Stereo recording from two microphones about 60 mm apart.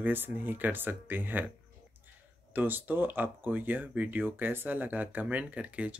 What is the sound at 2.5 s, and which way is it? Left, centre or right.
Speech, right.